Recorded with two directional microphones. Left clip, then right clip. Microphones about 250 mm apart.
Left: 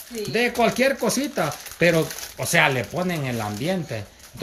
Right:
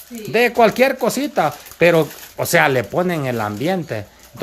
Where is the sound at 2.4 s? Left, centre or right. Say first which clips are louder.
Right 5 dB; centre.